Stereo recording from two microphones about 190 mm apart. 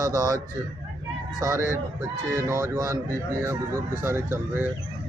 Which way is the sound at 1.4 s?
15° right (ahead or behind).